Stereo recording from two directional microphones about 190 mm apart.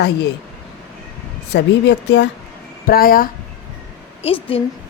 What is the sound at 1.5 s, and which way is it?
Speech, 65° left (ahead or behind).